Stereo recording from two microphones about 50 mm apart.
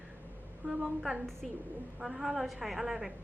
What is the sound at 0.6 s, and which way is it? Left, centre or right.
A woman's voice, centre.